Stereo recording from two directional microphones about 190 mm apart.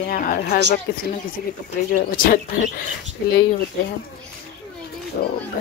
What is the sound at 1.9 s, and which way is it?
Speech, 50° left (ahead or behind).